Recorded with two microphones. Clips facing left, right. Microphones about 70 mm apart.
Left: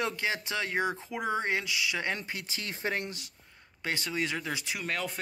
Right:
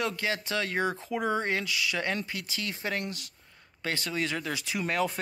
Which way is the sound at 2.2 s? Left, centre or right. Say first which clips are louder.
Right 2 dB; left.